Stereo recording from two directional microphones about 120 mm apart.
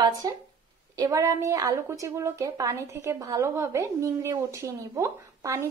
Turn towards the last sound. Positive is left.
turn(degrees=-25)  # may be behind; listen again after turning